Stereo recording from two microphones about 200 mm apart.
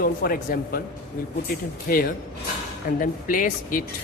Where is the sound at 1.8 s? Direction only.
45° left (ahead or behind).